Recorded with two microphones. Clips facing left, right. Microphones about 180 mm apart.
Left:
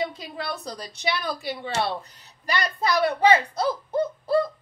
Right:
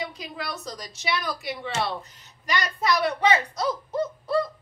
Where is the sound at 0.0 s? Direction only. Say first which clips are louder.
Left 4 dB; 30° left (ahead or behind).